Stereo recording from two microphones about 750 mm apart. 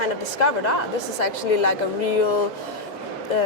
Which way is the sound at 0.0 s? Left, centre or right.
Left.